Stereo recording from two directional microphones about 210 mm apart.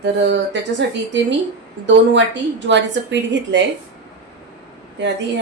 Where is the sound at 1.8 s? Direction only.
60° right (ahead or behind).